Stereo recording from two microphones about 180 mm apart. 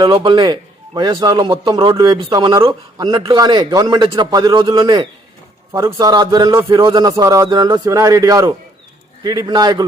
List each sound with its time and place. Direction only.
0.0 s a man's voice: 25° right (ahead or behind)